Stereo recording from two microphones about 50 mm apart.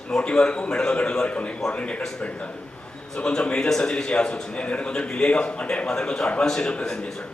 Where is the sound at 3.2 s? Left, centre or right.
Centre.